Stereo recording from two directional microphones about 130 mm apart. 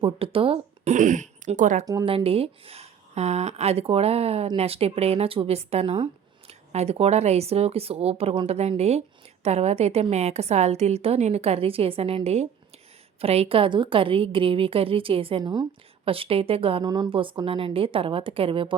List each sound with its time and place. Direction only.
0.0 s speech: 45° right (ahead or behind)
0.9 s speech: 75° right (ahead or behind)
1.8 s a woman's voice: 25° right (ahead or behind)
2.0 s speech: 45° right (ahead or behind)
16.0 s speech: 45° right (ahead or behind)
16.8 s speech: 30° right (ahead or behind)